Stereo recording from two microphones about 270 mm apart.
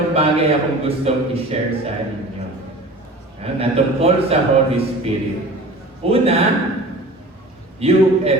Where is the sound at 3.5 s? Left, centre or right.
Right.